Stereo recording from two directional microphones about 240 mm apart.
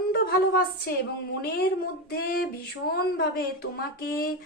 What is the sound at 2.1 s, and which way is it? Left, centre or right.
A woman's voice, left.